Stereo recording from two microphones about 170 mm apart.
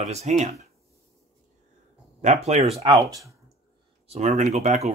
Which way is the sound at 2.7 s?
35° right (ahead or behind).